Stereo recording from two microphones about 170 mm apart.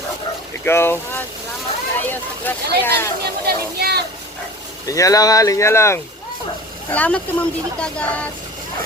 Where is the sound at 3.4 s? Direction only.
70° right (ahead or behind).